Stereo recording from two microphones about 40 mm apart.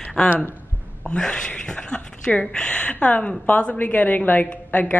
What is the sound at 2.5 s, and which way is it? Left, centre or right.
A woman's voice, left.